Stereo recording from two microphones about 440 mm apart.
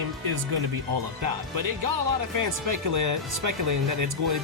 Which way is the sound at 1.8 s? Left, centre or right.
Right.